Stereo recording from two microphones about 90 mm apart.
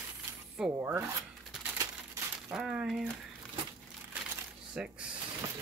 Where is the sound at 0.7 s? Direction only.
30° right (ahead or behind).